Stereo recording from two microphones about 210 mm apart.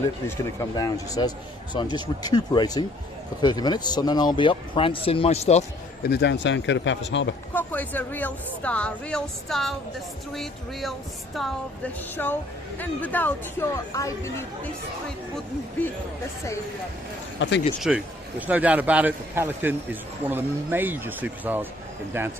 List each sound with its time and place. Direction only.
0.3 s speech: 15° left (ahead or behind); by 5.6 s 30° left (ahead or behind)
6.0 s speech: 50° left (ahead or behind)
7.5 s speech: 10° left (ahead or behind)
17.4 s speech: 60° left (ahead or behind)
17.7 s speech: 5° right (ahead or behind)